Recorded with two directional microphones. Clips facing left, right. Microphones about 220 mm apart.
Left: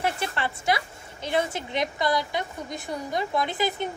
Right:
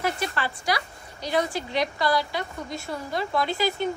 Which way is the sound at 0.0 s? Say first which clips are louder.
Even; 25° left (ahead or behind).